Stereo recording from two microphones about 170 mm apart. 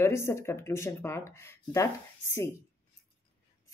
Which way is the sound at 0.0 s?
15° left (ahead or behind).